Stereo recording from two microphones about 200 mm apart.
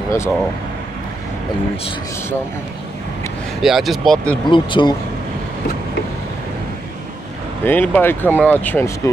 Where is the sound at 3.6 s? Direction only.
Centre (ahead or behind).